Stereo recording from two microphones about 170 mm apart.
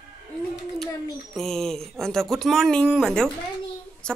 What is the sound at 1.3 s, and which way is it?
Speech, centre (ahead or behind).